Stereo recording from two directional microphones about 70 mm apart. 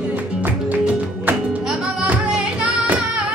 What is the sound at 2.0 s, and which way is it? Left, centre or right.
Flamenco, centre.